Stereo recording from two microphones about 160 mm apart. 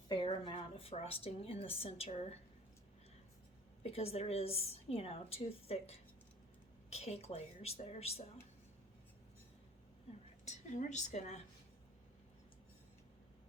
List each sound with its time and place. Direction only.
0.1 s a woman's voice: 30° left (ahead or behind)
3.8 s a woman's voice: 40° left (ahead or behind)
10.4 s a woman's voice: 50° left (ahead or behind)